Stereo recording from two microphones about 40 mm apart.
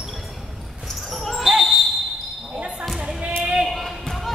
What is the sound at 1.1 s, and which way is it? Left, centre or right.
Basketball bounce, centre.